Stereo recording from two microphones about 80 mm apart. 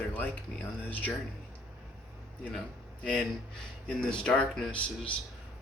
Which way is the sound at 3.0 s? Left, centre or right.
Centre.